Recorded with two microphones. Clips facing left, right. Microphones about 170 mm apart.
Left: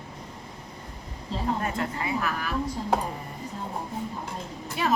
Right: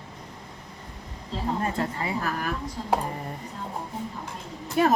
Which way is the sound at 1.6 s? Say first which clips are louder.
Right 1 dB; 30° right (ahead or behind).